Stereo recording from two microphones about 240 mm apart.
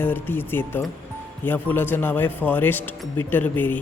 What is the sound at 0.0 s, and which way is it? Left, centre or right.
Speech, centre.